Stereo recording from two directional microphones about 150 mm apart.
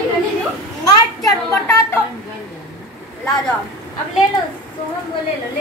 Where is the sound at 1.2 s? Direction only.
20° left (ahead or behind).